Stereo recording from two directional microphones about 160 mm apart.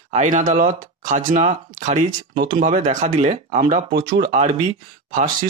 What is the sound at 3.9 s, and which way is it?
Speech, 80° right.